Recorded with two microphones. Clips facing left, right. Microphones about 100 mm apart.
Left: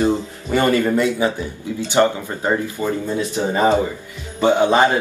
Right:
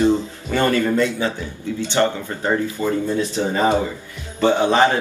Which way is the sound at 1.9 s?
15° left (ahead or behind).